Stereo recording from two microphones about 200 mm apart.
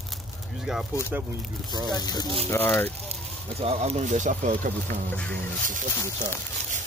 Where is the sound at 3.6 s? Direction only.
30° right (ahead or behind).